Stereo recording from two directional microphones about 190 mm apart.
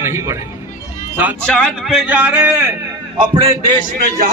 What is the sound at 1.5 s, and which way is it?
A man's voice, 5° left (ahead or behind).